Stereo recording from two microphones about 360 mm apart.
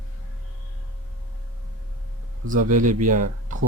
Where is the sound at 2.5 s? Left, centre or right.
Right.